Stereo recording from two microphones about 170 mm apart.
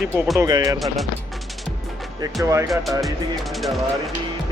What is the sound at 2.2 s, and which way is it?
Speech, 15° right (ahead or behind).